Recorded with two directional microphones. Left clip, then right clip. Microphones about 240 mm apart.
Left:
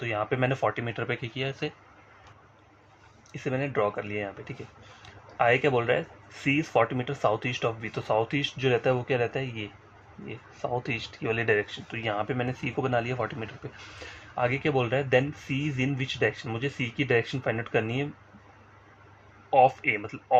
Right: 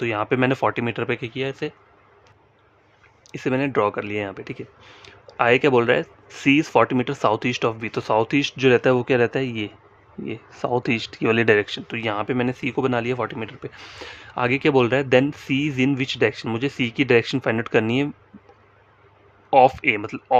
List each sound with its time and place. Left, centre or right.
0.0 s speech: right
3.3 s speech: right
19.5 s speech: right